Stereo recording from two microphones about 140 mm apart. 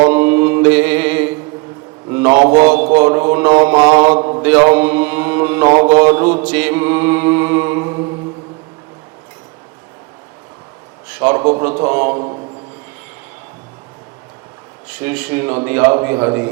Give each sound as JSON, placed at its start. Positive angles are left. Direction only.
{"t": 0.1, "sound": "mantra", "side_deg": -15}
{"t": 2.4, "sound": "mantra", "side_deg": -60}
{"t": 2.9, "sound": "a man's voice", "side_deg": -15}
{"t": 3.9, "sound": "mantra", "side_deg": -15}
{"t": 4.2, "sound": "mantra", "side_deg": -35}
{"t": 4.4, "sound": "mantra", "side_deg": -15}
{"t": 11.1, "sound": "a man's voice", "side_deg": -15}
{"t": 14.8, "sound": "a man's voice", "side_deg": -10}